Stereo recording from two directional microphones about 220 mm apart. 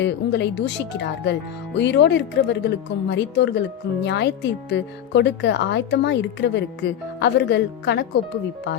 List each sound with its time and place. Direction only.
0.0 s speech: 50° left (ahead or behind)